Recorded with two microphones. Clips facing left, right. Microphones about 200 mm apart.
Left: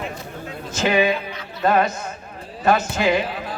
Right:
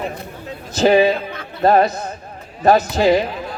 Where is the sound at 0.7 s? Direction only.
35° right (ahead or behind).